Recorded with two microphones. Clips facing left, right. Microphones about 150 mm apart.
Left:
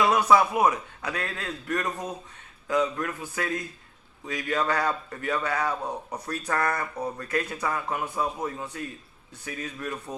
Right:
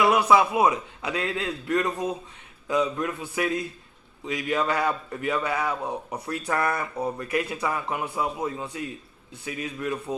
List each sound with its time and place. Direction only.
0.0 s a man's voice: 10° right (ahead or behind)
6.1 s a man's voice: 25° right (ahead or behind)
6.4 s a man's voice: 15° right (ahead or behind)